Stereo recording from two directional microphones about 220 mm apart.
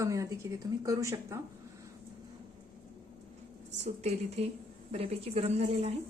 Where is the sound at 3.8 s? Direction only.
30° right (ahead or behind).